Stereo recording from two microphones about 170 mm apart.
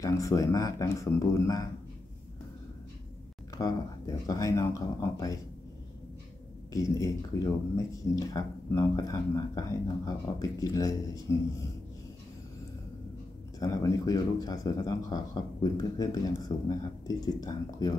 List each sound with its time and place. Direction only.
0.0 s speech: 20° left (ahead or behind)
3.5 s speech: 20° left (ahead or behind)
6.7 s speech: 20° left (ahead or behind)
13.6 s speech: 20° left (ahead or behind)